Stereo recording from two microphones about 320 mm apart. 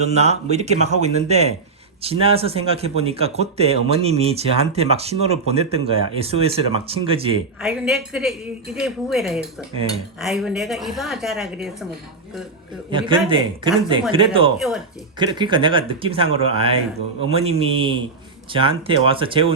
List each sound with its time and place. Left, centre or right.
0.0 s speech: centre
7.6 s a woman's voice: centre
12.9 s speech: centre